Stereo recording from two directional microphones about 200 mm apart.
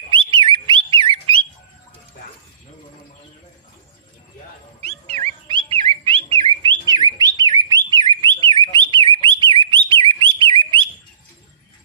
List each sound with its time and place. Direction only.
0.1 s a sound: 25° right (ahead or behind)
4.8 s dog: 30° right (ahead or behind)
5.5 s bird: 25° right (ahead or behind)
8.7 s whistle: 25° right (ahead or behind)
9.2 s bird: 25° right (ahead or behind)